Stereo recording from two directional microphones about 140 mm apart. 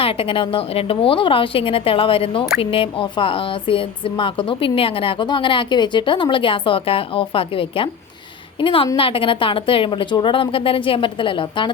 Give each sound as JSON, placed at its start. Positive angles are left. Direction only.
{"t": 0.0, "sound": "a woman's voice", "side_deg": 40}